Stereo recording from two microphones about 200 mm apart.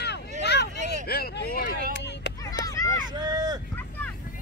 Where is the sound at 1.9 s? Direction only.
60° left (ahead or behind).